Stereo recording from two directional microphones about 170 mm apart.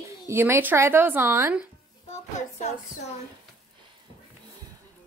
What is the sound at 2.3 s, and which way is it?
Music, 40° left (ahead or behind).